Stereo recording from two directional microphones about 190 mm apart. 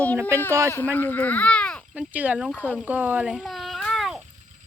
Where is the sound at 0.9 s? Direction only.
10° left (ahead or behind).